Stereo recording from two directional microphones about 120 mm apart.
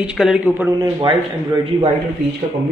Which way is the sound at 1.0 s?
40° right (ahead or behind).